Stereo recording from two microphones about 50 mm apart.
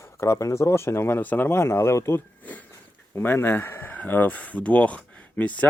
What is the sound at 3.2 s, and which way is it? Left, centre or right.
Speech, left.